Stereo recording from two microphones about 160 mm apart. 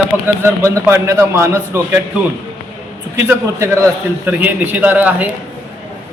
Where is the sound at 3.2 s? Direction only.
15° right (ahead or behind).